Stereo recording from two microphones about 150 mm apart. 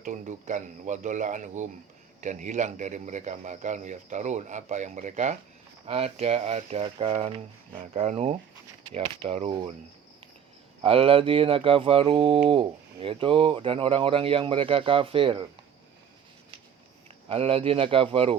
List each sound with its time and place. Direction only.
0.0 s a man's voice: 55° right (ahead or behind); by 9.7 s 35° right (ahead or behind)
10.8 s speech: 40° right (ahead or behind)
17.2 s speech: 40° right (ahead or behind)